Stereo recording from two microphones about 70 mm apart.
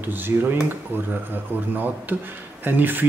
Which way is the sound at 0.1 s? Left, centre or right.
Right.